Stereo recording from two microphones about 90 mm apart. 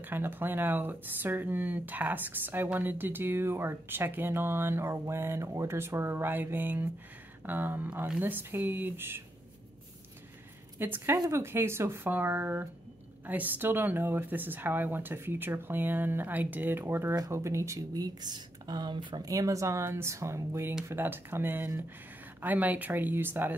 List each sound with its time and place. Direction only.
0.0 s speech: 25° right (ahead or behind)
10.8 s speech: 25° right (ahead or behind); by 19.2 s 60° right (ahead or behind)
19.2 s speech: 40° right (ahead or behind)